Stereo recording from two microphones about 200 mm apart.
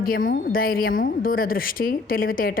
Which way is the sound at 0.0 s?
45° left (ahead or behind).